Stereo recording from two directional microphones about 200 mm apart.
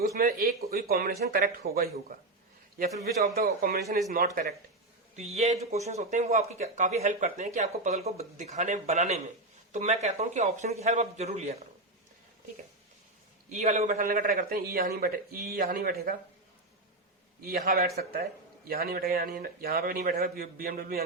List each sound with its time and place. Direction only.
0.2 s a man's voice: 50° right (ahead or behind)
5.1 s speech: 30° right (ahead or behind)
13.5 s a man's voice: 35° right (ahead or behind)
17.4 s a man's voice: 45° right (ahead or behind)